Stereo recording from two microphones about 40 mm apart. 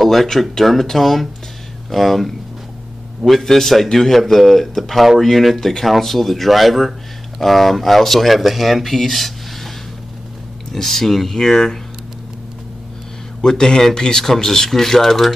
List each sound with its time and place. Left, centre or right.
0.0 s speech: centre
10.7 s speech: centre
13.4 s speech: centre